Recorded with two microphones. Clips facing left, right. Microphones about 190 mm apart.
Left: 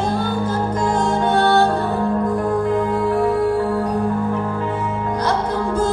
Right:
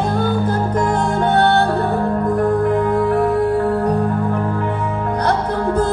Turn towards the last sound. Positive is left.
turn(degrees=-60)  # may be behind; listen again after turning